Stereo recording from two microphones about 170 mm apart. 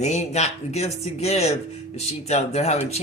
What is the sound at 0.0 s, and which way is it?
Speech, 40° left (ahead or behind).